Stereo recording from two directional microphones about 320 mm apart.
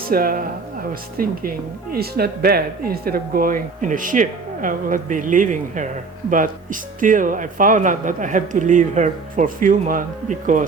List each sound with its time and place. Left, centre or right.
0.1 s speech: right